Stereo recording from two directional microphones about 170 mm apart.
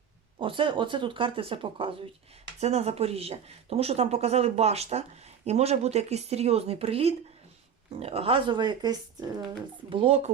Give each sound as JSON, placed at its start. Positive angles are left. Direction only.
{"t": 0.3, "sound": "speech", "side_deg": -30}